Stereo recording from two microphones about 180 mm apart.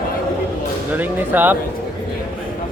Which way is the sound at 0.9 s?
10° right (ahead or behind).